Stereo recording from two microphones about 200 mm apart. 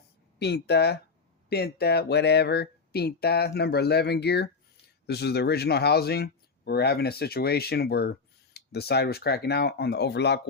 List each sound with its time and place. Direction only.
0.3 s speech: 55° left (ahead or behind)